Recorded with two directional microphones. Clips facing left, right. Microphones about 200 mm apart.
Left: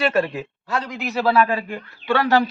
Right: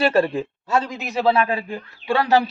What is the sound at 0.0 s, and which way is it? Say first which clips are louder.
A man's voice: right 2 dB; 30° right (ahead or behind).